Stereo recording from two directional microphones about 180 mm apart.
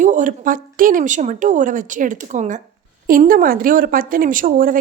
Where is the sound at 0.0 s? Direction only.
45° right (ahead or behind).